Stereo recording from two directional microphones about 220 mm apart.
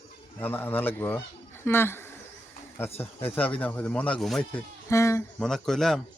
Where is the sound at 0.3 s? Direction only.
10° left (ahead or behind).